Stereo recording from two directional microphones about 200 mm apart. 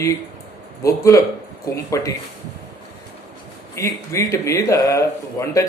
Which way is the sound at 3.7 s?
15° left (ahead or behind).